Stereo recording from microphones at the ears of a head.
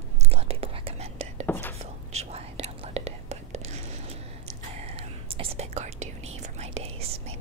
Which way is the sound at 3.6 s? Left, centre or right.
Right.